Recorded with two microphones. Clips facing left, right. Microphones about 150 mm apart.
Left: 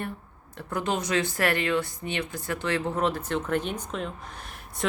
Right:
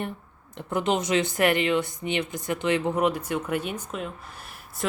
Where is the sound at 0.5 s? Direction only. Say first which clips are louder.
Right 4 dB; 20° right (ahead or behind).